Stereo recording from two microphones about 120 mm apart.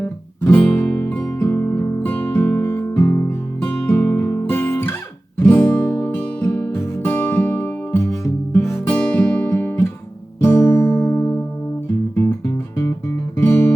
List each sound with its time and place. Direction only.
0.0 s music: 15° left (ahead or behind)
13.3 s music: 20° left (ahead or behind)